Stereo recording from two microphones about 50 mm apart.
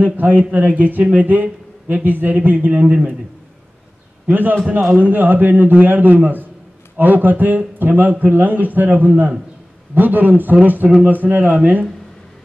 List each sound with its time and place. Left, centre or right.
0.0 s a man's voice: right
4.3 s a man's voice: right